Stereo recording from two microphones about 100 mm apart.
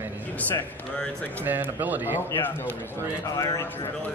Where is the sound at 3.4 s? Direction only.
35° left (ahead or behind).